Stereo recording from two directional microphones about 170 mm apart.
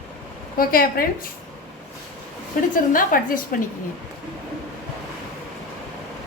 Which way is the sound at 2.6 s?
55° left (ahead or behind).